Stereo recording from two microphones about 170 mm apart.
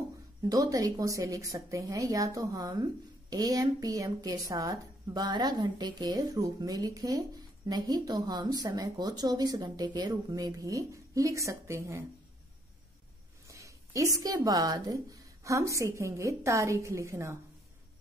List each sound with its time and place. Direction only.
0.4 s a woman's voice: 20° right (ahead or behind)
13.5 s a sound: 20° right (ahead or behind)
14.2 s a woman's voice: 20° right (ahead or behind)